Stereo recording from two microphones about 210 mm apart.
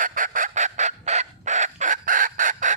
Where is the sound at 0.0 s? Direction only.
40° right (ahead or behind).